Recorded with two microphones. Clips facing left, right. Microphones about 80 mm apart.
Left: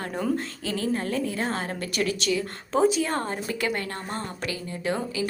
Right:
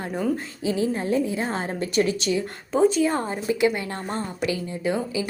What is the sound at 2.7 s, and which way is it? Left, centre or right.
Speech, centre.